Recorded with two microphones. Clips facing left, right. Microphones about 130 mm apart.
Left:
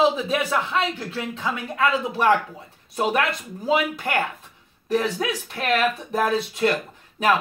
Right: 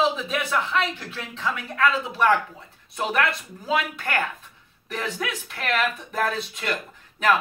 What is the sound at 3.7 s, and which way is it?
A man's voice, 15° left (ahead or behind).